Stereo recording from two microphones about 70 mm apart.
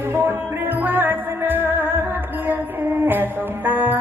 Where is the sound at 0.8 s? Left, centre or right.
Right.